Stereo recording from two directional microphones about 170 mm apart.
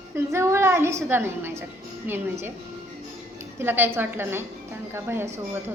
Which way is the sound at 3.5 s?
10° right (ahead or behind).